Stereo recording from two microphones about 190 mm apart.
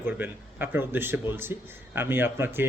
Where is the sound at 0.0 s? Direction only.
10° right (ahead or behind).